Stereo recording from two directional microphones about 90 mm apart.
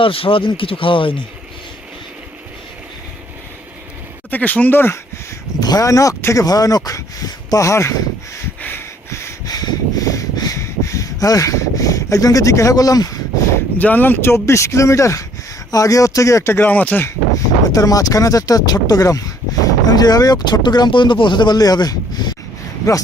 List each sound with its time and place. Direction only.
0.0 s speech: 85° left
4.3 s speech: 15° left (ahead or behind)
5.5 s speech: 45° left (ahead or behind)
8.6 s a sound: 25° left (ahead or behind)
9.5 s a sound: 45° left (ahead or behind)
13.7 s speech: 20° left (ahead or behind)
17.7 s speech: 40° left (ahead or behind)
22.9 s speech: 40° left (ahead or behind)